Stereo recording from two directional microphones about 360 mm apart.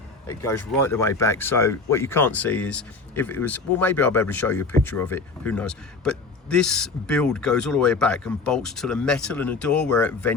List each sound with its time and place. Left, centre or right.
0.3 s speech: centre